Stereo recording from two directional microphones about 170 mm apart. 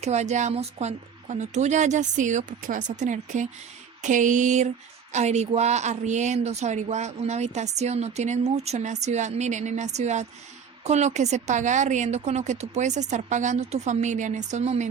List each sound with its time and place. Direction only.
0.0 s a woman's voice: 40° right (ahead or behind)